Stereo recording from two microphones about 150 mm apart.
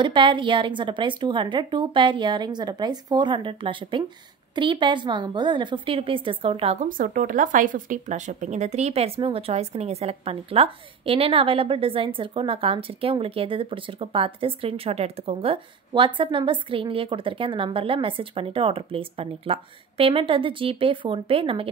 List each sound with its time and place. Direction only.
0.0 s speech: 35° right (ahead or behind)
6.9 s speech: 65° right (ahead or behind); by 21.6 s 40° right (ahead or behind)